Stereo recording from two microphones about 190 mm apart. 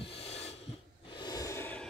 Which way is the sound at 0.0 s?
30° left (ahead or behind).